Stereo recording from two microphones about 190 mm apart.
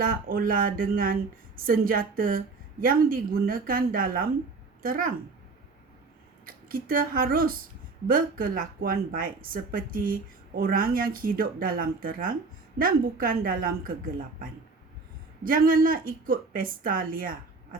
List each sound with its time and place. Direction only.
0.0 s speech: 50° right (ahead or behind)
6.4 s speech: 50° right (ahead or behind)
15.4 s speech: 50° right (ahead or behind)